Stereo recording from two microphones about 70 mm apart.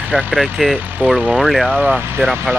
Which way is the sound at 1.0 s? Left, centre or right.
Right.